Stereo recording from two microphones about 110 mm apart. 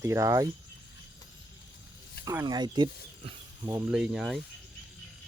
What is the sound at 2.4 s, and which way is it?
Speech, 40° right (ahead or behind).